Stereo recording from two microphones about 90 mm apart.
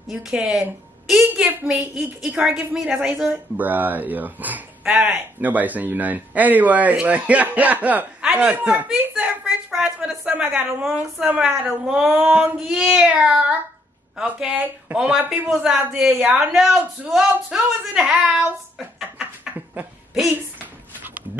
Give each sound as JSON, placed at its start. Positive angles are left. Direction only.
{"t": 0.1, "sound": "a woman's voice", "side_deg": -5}
{"t": 1.3, "sound": "a woman's voice", "side_deg": -20}
{"t": 2.0, "sound": "a woman's voice", "side_deg": -5}
{"t": 12.3, "sound": "a woman's voice", "side_deg": -20}
{"t": 12.5, "sound": "a woman's voice", "side_deg": -5}
{"t": 19.5, "sound": "a sound", "side_deg": -20}